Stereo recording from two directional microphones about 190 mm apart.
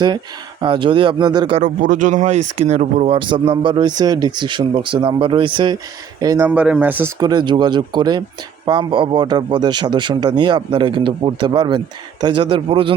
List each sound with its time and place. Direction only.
0.6 s speech: 25° right (ahead or behind)
1.6 s speech: 40° right (ahead or behind); by 6.5 s 20° right (ahead or behind)
6.5 s speech: 5° right (ahead or behind); by 12.9 s 30° right (ahead or behind)